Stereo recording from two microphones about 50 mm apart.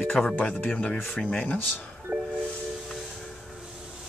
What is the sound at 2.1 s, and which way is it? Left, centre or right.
Music, right.